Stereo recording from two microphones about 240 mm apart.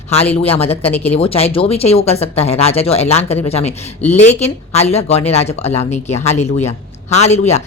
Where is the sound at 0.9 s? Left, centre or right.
Centre.